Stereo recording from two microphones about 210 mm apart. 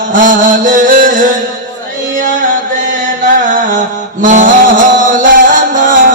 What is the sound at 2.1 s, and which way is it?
Music, 40° right (ahead or behind).